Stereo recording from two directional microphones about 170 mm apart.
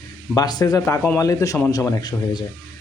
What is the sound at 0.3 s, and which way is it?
A man's voice, 25° left (ahead or behind).